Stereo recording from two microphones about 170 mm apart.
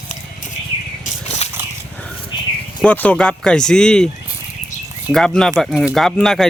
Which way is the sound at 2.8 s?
10° left (ahead or behind).